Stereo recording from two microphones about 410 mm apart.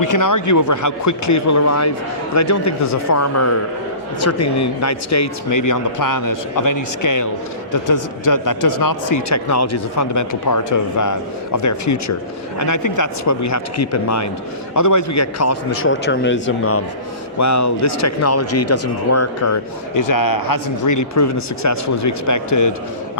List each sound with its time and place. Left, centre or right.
0.0 s speech: left
17.3 s speech: left